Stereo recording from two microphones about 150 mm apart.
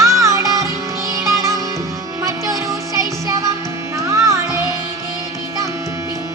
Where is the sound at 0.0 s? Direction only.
20° right (ahead or behind).